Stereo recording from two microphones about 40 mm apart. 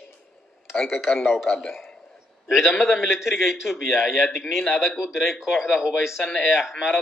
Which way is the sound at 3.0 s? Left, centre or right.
Centre.